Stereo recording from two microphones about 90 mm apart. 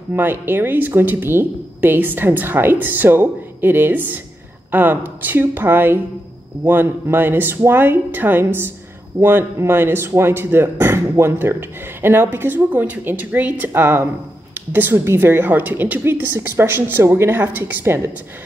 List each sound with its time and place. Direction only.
0.1 s a woman's voice: 20° right (ahead or behind)
14.5 s a sound: 20° right (ahead or behind)
15.0 s a woman's voice: 25° right (ahead or behind)